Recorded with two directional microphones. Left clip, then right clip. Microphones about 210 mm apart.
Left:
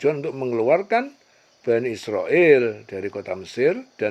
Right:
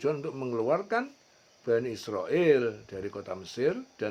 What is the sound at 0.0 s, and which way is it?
Speech, 25° left (ahead or behind).